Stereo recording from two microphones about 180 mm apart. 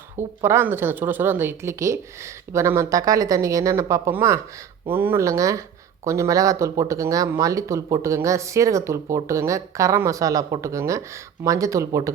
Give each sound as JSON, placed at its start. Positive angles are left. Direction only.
{"t": 0.4, "sound": "speech", "side_deg": -15}